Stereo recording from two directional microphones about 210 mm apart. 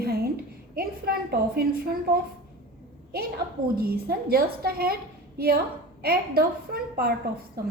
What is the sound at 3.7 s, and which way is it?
A woman's voice, 45° right (ahead or behind).